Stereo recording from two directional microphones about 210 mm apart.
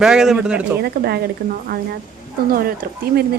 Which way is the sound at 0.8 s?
50° right (ahead or behind).